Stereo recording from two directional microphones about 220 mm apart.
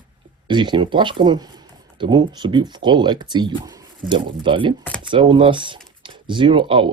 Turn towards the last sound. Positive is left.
turn(degrees=-25)  # may be behind; listen again after turning